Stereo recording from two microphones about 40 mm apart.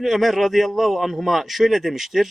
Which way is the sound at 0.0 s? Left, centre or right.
Centre.